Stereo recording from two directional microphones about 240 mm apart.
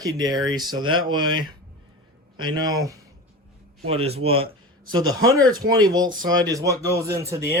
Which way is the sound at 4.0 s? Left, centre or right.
Right.